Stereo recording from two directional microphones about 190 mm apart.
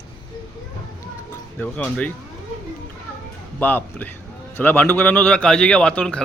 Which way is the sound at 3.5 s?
10° left (ahead or behind).